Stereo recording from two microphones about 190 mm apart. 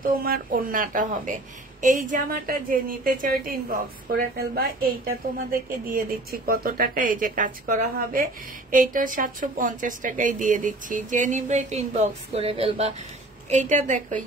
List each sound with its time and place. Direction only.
0.0 s a woman's voice: 50° right (ahead or behind)